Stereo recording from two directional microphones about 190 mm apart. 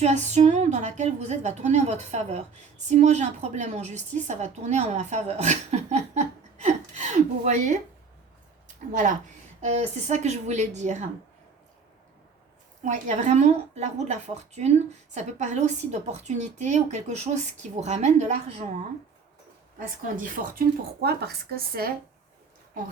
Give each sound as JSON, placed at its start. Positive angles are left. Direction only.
{"t": 0.0, "sound": "a woman's voice", "side_deg": -40}
{"t": 8.9, "sound": "a woman's voice", "side_deg": -40}
{"t": 12.8, "sound": "a woman's voice", "side_deg": -40}
{"t": 20.1, "sound": "a woman's voice", "side_deg": -45}